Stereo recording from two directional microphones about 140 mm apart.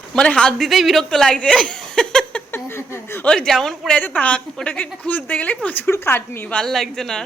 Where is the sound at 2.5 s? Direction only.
15° left (ahead or behind).